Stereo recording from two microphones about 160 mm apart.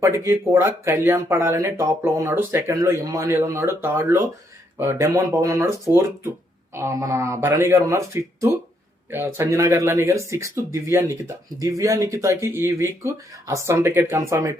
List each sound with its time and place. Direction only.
0.3 s speech: 15° right (ahead or behind)